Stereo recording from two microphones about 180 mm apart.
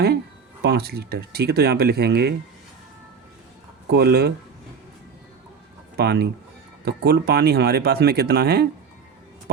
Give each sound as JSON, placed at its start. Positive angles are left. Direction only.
{"t": 0.6, "sound": "speech", "side_deg": -60}
{"t": 3.8, "sound": "speech", "side_deg": -65}
{"t": 6.0, "sound": "speech", "side_deg": -65}